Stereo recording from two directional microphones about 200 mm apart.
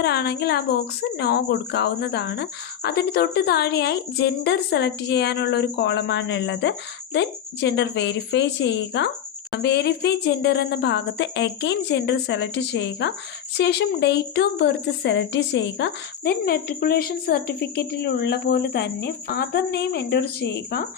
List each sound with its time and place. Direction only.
0.0 s speech: 55° left (ahead or behind)